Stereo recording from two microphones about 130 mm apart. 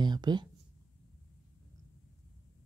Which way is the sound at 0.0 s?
35° right (ahead or behind).